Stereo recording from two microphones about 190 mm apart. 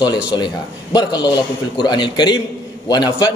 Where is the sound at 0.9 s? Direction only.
20° left (ahead or behind).